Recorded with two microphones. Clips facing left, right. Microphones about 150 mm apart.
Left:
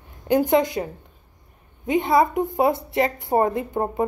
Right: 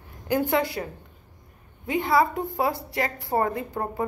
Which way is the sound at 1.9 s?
20° left (ahead or behind).